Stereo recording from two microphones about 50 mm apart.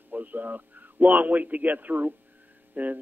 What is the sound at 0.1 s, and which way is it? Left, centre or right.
A man's voice, right.